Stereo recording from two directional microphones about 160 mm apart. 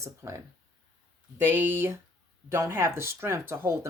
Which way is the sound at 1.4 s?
15° right (ahead or behind).